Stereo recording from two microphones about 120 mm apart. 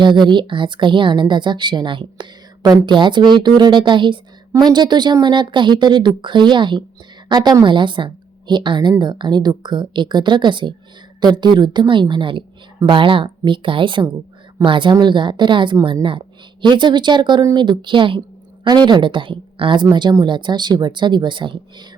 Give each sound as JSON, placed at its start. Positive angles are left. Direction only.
{"t": 0.0, "sound": "a woman's voice", "side_deg": -40}